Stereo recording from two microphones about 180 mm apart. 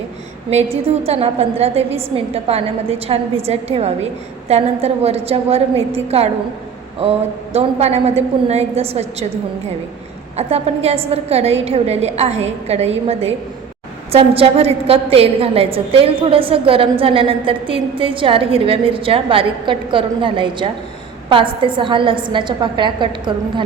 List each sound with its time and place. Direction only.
0.5 s a woman's voice: 35° right (ahead or behind)
10.3 s a woman's voice: 35° right (ahead or behind)